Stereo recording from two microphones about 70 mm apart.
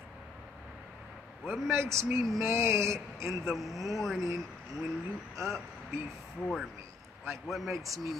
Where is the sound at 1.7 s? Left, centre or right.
Right.